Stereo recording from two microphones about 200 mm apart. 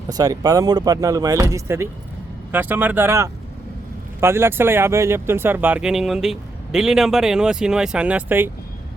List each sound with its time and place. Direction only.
0.1 s speech: 20° right (ahead or behind)